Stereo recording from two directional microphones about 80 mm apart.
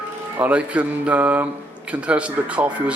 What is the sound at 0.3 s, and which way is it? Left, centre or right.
Speech, centre.